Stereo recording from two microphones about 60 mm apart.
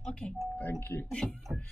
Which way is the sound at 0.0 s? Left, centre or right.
Centre.